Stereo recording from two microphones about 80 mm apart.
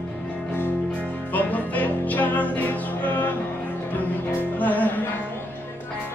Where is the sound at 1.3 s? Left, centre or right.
Left.